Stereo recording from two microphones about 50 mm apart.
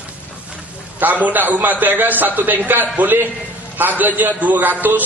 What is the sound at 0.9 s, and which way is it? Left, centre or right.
A man's voice, right.